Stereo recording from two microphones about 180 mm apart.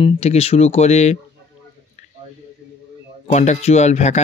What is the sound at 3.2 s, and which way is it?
Speech, 40° left (ahead or behind).